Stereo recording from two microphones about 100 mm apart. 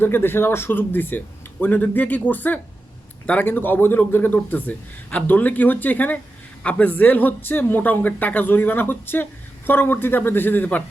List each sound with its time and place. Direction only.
0.0 s a man's voice: 20° left (ahead or behind)